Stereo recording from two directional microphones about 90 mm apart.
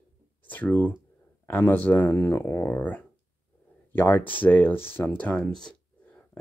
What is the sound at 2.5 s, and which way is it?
Speech, 20° left (ahead or behind).